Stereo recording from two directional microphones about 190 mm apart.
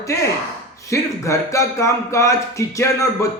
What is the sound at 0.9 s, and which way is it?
Speech, 15° left (ahead or behind).